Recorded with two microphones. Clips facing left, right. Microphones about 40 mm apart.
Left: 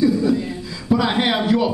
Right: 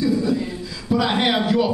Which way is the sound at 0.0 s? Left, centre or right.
Centre.